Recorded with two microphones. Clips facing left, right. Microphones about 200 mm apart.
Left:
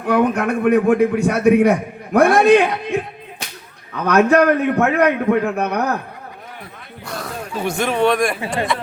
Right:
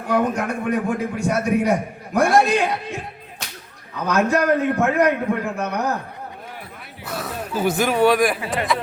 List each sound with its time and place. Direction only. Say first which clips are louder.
0.1 s a man's voice: left 4 dB; 60° left (ahead or behind)
4.0 s a man's voice: left 6 dB; 65° left (ahead or behind)
7.0 s speech: even; 5° right (ahead or behind)